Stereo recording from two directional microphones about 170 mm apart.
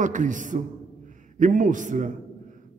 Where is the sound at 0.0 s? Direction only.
50° right (ahead or behind).